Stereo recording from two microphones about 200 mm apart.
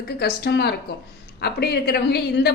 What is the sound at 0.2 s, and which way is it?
A woman's voice, 55° left (ahead or behind).